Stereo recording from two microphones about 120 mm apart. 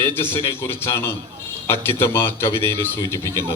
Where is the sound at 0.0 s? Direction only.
20° left (ahead or behind).